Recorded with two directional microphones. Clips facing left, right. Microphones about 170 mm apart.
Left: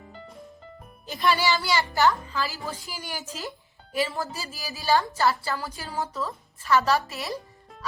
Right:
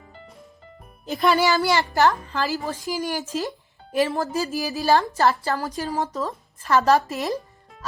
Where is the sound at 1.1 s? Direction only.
50° right (ahead or behind).